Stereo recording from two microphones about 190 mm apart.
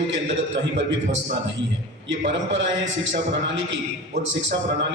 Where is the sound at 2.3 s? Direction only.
75° right (ahead or behind).